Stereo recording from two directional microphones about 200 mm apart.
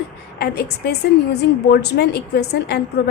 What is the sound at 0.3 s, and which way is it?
A woman's voice, 55° left (ahead or behind).